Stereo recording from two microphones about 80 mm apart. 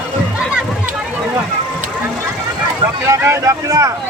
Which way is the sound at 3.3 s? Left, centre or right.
Right.